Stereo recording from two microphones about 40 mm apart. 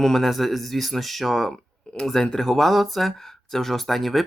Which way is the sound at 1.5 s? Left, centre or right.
Left.